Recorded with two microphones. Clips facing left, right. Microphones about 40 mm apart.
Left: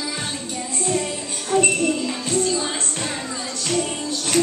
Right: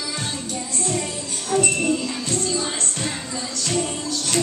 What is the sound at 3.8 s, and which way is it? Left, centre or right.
Music, left.